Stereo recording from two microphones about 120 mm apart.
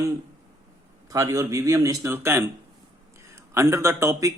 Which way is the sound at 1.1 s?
30° right (ahead or behind).